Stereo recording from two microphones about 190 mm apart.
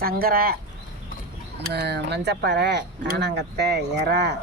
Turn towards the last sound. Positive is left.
turn(degrees=-65)  # may be behind; listen again after turning